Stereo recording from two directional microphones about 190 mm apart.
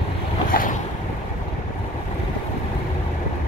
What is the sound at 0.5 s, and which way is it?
Boat, 45° left (ahead or behind).